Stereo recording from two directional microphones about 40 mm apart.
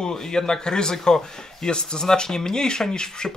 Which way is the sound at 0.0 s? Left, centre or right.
Centre.